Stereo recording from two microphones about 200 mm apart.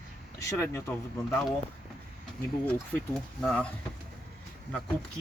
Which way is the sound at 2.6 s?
5° left (ahead or behind).